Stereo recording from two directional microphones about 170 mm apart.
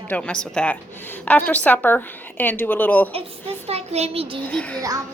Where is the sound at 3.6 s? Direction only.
40° right (ahead or behind).